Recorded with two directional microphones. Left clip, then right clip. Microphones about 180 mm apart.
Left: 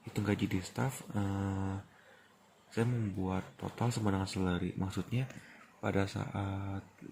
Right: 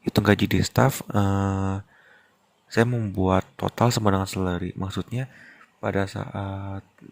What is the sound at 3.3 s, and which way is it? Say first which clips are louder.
Speech: right 16 dB; 60° right (ahead or behind).